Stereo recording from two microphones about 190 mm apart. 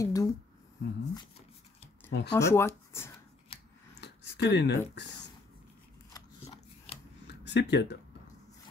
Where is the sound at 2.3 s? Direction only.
15° left (ahead or behind).